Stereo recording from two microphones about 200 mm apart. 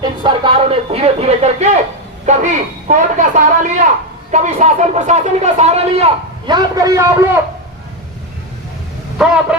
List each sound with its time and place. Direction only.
0.0 s a man's voice: 20° right (ahead or behind)
6.5 s a man's voice: 20° right (ahead or behind)
9.1 s a sound: 5° right (ahead or behind)